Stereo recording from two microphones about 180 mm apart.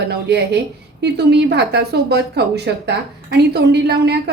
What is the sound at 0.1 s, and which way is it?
A woman's voice, 70° right (ahead or behind).